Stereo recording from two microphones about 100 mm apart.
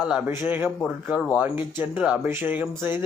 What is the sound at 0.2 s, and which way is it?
Speech, 20° right (ahead or behind).